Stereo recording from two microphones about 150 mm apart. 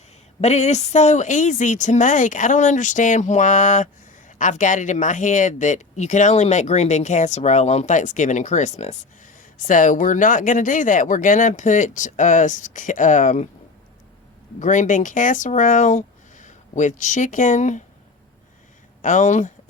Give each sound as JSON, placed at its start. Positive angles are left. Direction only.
{"t": 0.4, "sound": "speech", "side_deg": 50}
{"t": 14.6, "sound": "speech", "side_deg": 55}
{"t": 19.0, "sound": "speech", "side_deg": 55}